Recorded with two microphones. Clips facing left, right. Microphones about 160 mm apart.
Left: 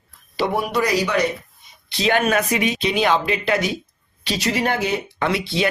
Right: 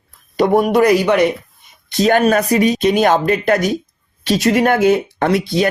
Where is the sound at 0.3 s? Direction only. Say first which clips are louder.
Right 9 dB; 45° right (ahead or behind).